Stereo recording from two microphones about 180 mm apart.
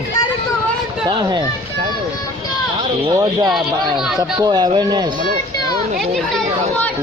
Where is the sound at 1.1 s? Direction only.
25° right (ahead or behind).